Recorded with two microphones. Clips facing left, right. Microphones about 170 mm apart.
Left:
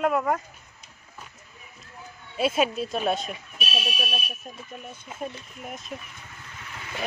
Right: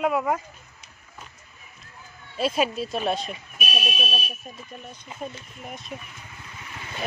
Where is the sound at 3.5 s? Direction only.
15° right (ahead or behind).